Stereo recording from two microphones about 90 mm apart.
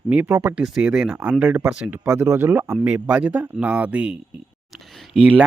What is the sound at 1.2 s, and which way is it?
Speech, 20° right (ahead or behind).